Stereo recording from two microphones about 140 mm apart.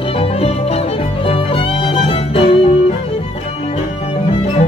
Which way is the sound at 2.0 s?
45° left (ahead or behind).